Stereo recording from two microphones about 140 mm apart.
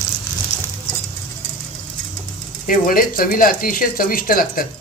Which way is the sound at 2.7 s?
85° left.